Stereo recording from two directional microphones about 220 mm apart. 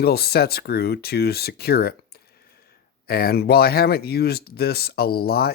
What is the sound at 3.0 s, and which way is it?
Speech, 45° left (ahead or behind).